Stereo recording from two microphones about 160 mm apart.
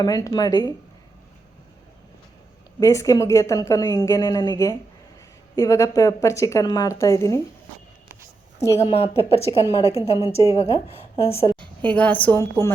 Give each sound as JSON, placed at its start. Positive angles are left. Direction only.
{"t": 0.0, "sound": "a woman's voice", "side_deg": 25}
{"t": 2.8, "sound": "a woman's voice", "side_deg": 20}
{"t": 8.5, "sound": "a woman's voice", "side_deg": 20}
{"t": 8.8, "sound": "a woman's voice", "side_deg": 40}
{"t": 9.4, "sound": "a woman's voice", "side_deg": 25}
{"t": 10.5, "sound": "a woman's voice", "side_deg": 40}
{"t": 11.8, "sound": "a woman's voice", "side_deg": 10}